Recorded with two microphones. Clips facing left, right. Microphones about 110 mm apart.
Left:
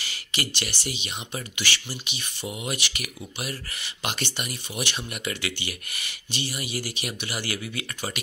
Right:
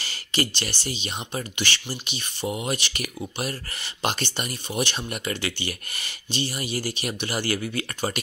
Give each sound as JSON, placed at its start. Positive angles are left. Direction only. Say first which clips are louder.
{"t": 0.0, "sound": "speech", "louder": "right 6 dB", "side_deg": -35}